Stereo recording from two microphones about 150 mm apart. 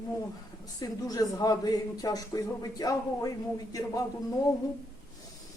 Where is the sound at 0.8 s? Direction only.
25° left (ahead or behind).